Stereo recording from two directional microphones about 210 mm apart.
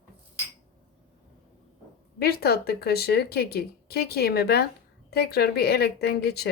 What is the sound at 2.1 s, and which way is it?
Speech, 50° left (ahead or behind).